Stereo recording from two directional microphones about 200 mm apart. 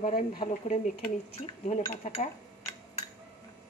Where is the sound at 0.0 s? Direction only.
45° left (ahead or behind).